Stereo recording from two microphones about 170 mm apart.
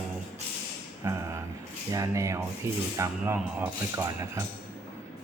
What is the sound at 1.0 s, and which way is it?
Speech, 15° right (ahead or behind).